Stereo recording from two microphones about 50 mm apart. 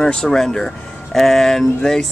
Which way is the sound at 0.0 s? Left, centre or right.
Centre.